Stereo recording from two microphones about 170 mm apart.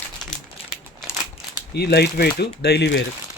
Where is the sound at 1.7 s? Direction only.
75° left (ahead or behind).